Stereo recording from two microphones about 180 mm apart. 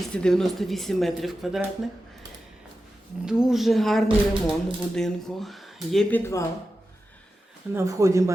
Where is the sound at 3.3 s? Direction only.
5° right (ahead or behind); by 6.4 s 15° left (ahead or behind).